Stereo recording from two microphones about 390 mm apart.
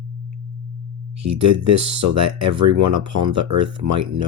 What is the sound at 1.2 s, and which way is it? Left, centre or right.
Speech, right.